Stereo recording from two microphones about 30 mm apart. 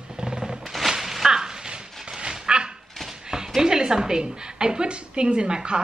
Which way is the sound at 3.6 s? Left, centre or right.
Right.